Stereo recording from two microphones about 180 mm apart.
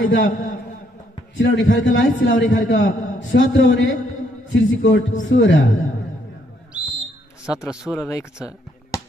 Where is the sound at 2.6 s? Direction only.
45° left (ahead or behind).